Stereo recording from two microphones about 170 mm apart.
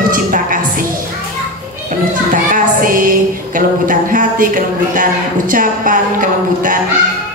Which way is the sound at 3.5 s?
55° right (ahead or behind).